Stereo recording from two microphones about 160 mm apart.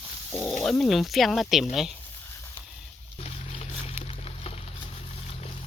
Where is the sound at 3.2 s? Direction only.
40° left (ahead or behind).